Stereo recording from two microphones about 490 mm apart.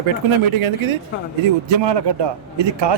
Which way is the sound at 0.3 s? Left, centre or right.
Right.